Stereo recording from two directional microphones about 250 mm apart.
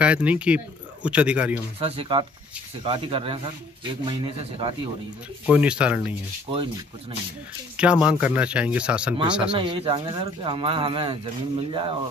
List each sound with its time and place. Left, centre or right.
0.0 s speech: centre
1.8 s speech: right
5.5 s speech: centre
6.5 s speech: right
7.7 s speech: centre
9.5 s speech: centre